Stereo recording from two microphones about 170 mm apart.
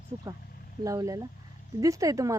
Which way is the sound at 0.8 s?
20° right (ahead or behind).